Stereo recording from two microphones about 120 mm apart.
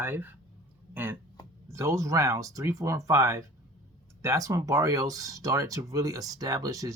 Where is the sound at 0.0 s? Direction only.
15° right (ahead or behind).